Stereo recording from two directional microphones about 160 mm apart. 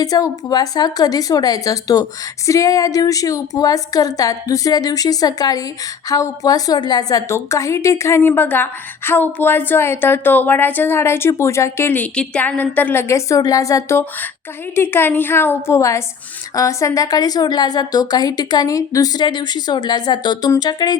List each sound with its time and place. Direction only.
0.0 s a woman's voice: 20° left (ahead or behind)